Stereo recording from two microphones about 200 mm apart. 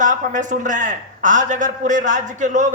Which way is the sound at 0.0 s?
40° right (ahead or behind).